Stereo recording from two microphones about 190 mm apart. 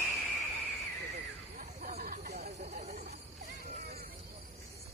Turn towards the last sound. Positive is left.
turn(degrees=-35)  # may be behind; listen again after turning